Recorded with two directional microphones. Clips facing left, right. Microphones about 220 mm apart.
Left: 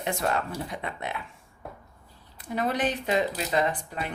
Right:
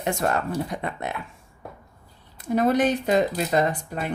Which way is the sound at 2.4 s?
45° right (ahead or behind).